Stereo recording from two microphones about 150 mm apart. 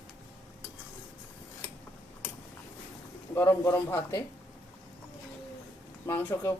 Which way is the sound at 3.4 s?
15° left (ahead or behind).